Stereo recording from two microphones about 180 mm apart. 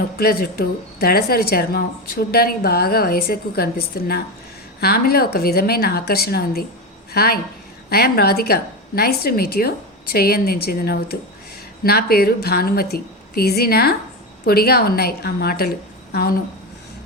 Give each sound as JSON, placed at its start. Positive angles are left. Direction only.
{"t": 0.2, "sound": "speech", "side_deg": 55}